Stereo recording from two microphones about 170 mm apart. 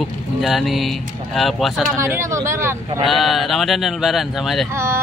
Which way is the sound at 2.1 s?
15° right (ahead or behind).